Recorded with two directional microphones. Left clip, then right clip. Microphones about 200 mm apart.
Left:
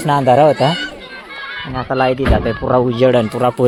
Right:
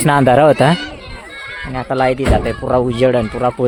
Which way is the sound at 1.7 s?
10° right (ahead or behind).